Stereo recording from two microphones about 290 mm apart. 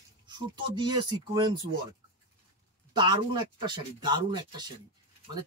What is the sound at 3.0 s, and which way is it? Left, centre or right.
Speech, centre.